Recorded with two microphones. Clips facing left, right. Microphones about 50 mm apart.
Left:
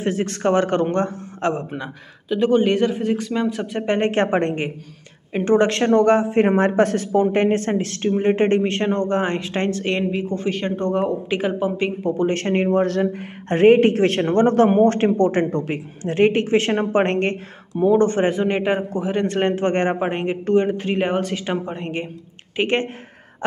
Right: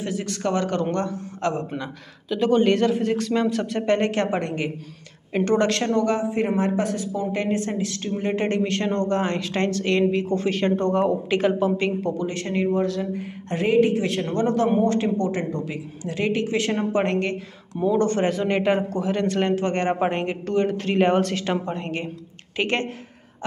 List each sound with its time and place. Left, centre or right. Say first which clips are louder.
0.0 s speech: left 5 dB; left
1.5 s a man's voice: left 2 dB; centre
5.3 s speech: left 3 dB; left
5.9 s speech: left 6 dB; left
10.1 s a man's voice: even; centre
12.2 s speech: left 5 dB; left
17.7 s speech: left 4 dB; left
19.2 s speech: left 3 dB; left
20.0 s a man's voice: left 1 dB; centre